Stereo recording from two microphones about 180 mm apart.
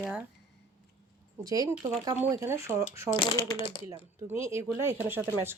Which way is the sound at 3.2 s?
25° left (ahead or behind).